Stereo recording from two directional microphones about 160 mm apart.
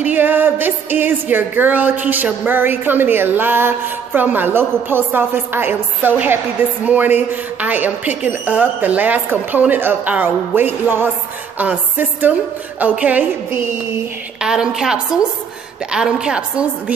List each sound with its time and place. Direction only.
0.0 s music: 10° right (ahead or behind)
14.4 s a woman's voice: 5° right (ahead or behind)
15.9 s music: 5° right (ahead or behind)